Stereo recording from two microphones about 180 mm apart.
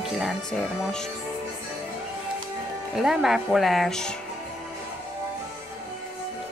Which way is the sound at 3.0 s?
Centre (ahead or behind).